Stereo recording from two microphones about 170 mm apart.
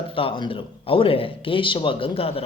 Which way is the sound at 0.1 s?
30° left (ahead or behind).